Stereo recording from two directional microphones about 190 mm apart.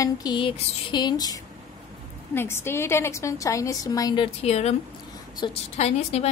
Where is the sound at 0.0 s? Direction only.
20° left (ahead or behind).